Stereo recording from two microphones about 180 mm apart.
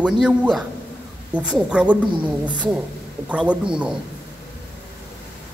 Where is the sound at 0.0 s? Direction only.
5° right (ahead or behind).